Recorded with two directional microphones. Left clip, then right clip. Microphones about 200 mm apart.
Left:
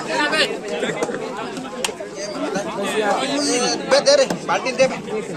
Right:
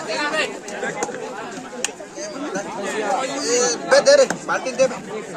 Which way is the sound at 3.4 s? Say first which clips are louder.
Even; 50° right (ahead or behind).